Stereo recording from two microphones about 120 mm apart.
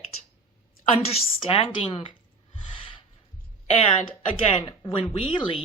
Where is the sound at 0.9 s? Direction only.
55° left (ahead or behind).